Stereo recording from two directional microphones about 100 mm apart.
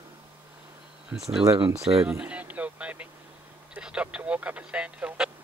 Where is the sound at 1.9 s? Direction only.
60° right (ahead or behind).